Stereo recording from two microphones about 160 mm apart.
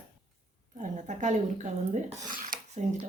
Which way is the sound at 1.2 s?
50° right (ahead or behind).